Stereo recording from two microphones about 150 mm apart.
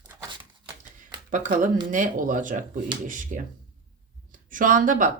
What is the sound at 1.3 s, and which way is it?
Speech, 60° right (ahead or behind).